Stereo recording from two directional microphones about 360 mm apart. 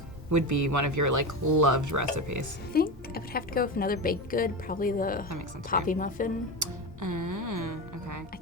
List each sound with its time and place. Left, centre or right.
0.3 s speech: right
2.7 s a woman's voice: left
6.6 s music: right